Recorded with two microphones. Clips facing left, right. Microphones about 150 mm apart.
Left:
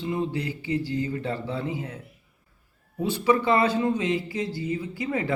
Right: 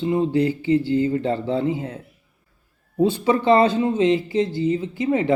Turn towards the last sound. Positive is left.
turn(degrees=-20)  # may be behind; listen again after turning